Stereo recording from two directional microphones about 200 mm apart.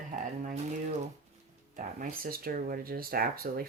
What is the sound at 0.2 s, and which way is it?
Speech, 40° right (ahead or behind).